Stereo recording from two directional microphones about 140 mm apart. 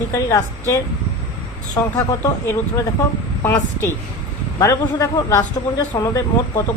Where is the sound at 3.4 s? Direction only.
15° left (ahead or behind).